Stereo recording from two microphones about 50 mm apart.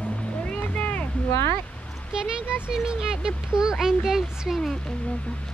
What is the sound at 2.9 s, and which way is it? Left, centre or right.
Speech, centre.